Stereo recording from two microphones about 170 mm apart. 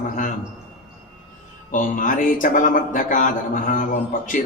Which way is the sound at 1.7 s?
50° left (ahead or behind).